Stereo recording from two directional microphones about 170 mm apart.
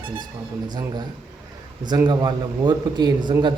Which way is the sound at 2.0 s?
25° right (ahead or behind).